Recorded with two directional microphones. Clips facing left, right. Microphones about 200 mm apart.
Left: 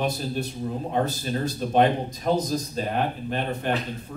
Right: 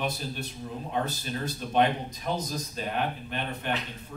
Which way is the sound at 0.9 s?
40° left (ahead or behind).